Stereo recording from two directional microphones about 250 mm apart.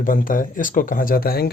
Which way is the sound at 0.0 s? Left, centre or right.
Left.